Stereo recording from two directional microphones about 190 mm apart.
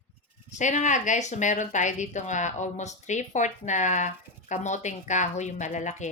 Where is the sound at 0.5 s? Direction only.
40° left (ahead or behind).